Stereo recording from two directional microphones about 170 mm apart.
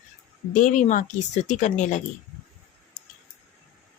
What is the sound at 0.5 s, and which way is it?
Speech, 50° left (ahead or behind).